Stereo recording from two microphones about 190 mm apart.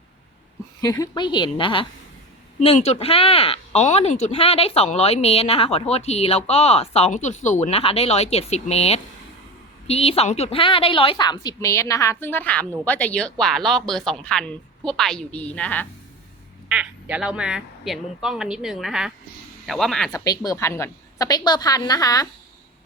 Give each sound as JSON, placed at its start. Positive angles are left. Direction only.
{"t": 0.8, "sound": "a woman's voice", "side_deg": 20}
{"t": 2.6, "sound": "a woman's voice", "side_deg": 35}
{"t": 16.6, "sound": "a woman's voice", "side_deg": -5}
{"t": 20.1, "sound": "a woman's voice", "side_deg": 20}